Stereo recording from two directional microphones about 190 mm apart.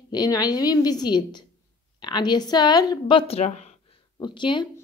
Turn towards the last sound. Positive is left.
turn(degrees=25)  # may be behind; listen again after turning